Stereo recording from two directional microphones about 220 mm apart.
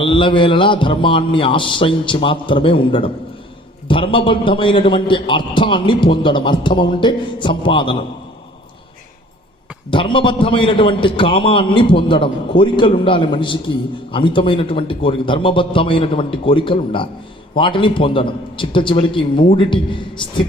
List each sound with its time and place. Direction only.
0.0 s a man's voice: 20° left (ahead or behind)
9.9 s a man's voice: 20° left (ahead or behind)